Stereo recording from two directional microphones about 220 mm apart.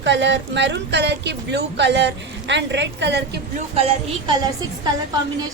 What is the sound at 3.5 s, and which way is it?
Speech, 25° right (ahead or behind).